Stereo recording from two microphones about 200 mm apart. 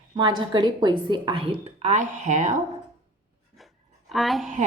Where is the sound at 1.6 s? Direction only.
35° right (ahead or behind).